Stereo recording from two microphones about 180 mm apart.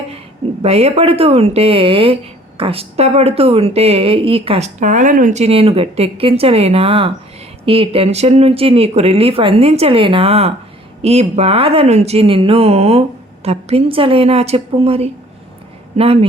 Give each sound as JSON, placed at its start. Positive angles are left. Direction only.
{"t": 0.6, "sound": "a woman's voice", "side_deg": -35}